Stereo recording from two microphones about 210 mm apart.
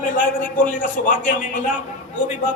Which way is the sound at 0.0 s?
40° left (ahead or behind).